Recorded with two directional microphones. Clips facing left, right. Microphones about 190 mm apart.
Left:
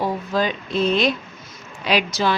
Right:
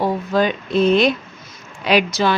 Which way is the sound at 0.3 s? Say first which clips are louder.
Right 5 dB; 55° right (ahead or behind).